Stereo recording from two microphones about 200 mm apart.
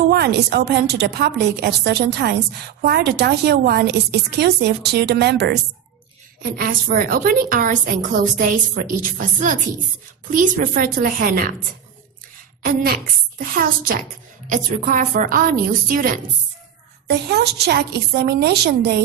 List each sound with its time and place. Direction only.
0.1 s a woman's voice: 55° right (ahead or behind)
12.6 s a woman's voice: 45° right (ahead or behind)
17.1 s a woman's voice: 55° right (ahead or behind)